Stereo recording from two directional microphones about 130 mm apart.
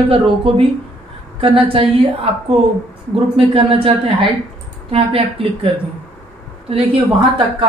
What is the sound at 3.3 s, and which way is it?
Speech, 45° right (ahead or behind).